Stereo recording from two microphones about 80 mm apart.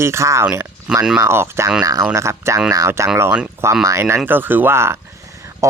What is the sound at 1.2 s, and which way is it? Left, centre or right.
Speech, right.